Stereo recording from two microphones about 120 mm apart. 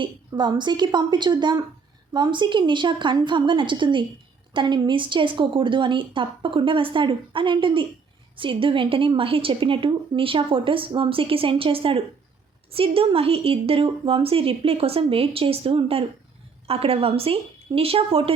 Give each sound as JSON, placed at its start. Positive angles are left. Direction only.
{"t": 0.0, "sound": "a woman's voice", "side_deg": -40}